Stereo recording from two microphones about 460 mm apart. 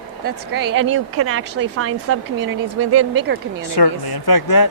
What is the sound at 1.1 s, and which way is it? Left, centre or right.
A woman's voice, right.